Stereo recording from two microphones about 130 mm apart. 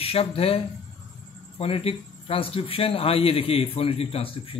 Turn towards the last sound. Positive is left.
turn(degrees=45)  # may be behind; listen again after turning